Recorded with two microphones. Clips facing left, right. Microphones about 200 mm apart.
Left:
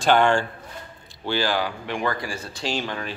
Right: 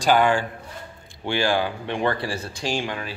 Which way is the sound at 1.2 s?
20° right (ahead or behind).